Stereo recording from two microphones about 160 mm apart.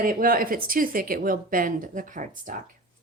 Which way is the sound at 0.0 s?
60° right (ahead or behind).